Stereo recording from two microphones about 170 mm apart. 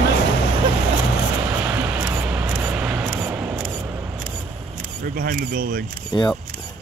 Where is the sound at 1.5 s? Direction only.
10° right (ahead or behind).